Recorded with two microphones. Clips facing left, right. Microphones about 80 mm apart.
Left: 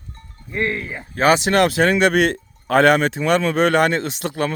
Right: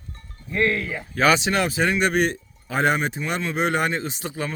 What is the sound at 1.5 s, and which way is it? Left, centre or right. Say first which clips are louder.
Speech: left 6 dB; left.